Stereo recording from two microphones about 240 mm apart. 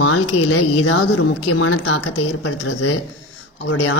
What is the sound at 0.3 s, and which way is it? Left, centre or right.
A woman's voice, left.